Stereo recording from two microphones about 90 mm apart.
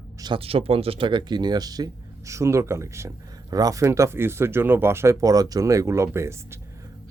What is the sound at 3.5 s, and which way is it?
Speech, 40° right (ahead or behind).